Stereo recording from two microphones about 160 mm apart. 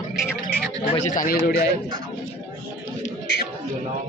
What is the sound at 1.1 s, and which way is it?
Speech, 55° left (ahead or behind).